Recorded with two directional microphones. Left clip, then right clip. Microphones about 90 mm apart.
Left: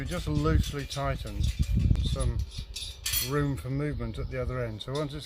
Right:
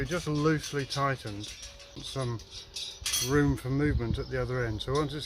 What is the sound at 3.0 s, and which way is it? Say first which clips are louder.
Cutlery: right 1 dB; 10° left (ahead or behind).